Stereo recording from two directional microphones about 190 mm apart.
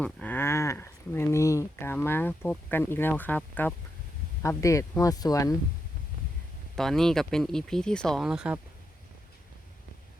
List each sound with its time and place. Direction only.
0.0 s a sound: 10° left (ahead or behind)
4.4 s speech: 15° left (ahead or behind)
6.7 s speech: centre (ahead or behind)